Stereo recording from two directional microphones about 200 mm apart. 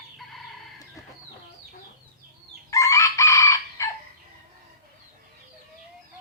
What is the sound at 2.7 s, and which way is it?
Chicken, 15° left (ahead or behind).